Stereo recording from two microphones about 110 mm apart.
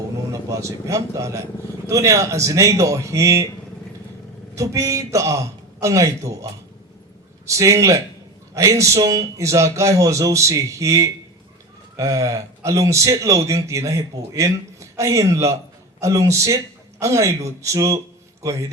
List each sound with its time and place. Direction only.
0.4 s speech: 30° right (ahead or behind)
4.5 s speech: 30° right (ahead or behind)